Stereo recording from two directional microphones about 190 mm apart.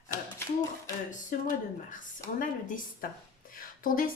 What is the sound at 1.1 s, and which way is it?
Speech, 40° left (ahead or behind).